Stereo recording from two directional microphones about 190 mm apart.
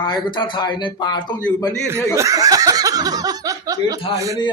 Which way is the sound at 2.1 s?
20° right (ahead or behind).